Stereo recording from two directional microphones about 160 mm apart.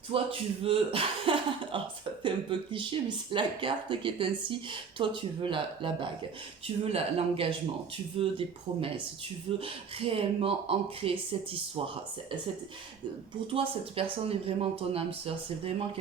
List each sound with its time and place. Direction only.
0.1 s speech: 35° right (ahead or behind)
13.5 s speech: 35° right (ahead or behind)